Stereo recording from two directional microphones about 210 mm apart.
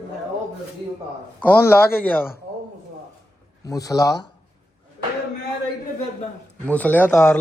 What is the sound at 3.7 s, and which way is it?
Speech, 15° left (ahead or behind).